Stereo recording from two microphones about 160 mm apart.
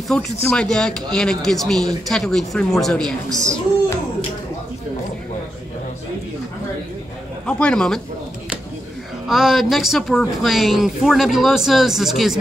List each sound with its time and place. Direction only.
0.1 s speech: 5° left (ahead or behind)
3.3 s a child's voice: 20° right (ahead or behind)
7.4 s speech: 5° left (ahead or behind)
9.3 s speech: centre (ahead or behind)